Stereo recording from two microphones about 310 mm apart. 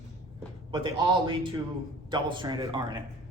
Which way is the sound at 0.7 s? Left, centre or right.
Centre.